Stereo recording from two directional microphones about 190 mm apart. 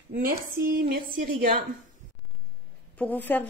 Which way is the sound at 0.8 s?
50° right (ahead or behind).